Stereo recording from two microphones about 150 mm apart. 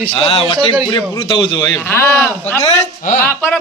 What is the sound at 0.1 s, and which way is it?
Speech, 40° left (ahead or behind).